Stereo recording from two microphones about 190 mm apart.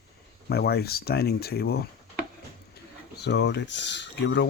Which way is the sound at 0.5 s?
60° left (ahead or behind).